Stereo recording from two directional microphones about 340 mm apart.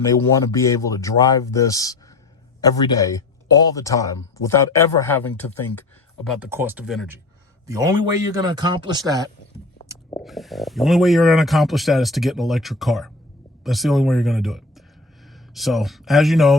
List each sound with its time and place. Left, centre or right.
0.0 s speech: centre
10.1 s speech: centre